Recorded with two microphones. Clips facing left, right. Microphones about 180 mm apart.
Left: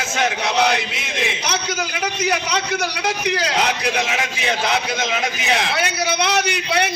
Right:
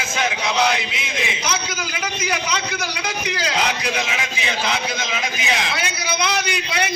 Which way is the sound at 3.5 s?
60° left (ahead or behind).